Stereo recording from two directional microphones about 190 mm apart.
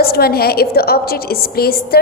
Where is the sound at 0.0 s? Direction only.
55° left (ahead or behind).